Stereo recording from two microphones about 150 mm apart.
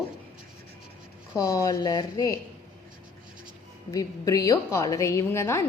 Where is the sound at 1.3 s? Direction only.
20° left (ahead or behind).